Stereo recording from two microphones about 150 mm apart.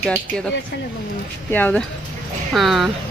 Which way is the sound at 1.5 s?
10° left (ahead or behind).